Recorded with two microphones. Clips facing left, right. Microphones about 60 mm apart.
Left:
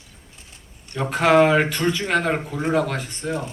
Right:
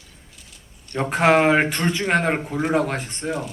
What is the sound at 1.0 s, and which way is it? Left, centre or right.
Speech, right.